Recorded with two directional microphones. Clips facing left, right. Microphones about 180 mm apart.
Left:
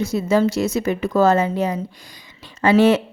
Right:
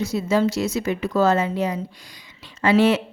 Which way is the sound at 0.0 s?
50° left (ahead or behind).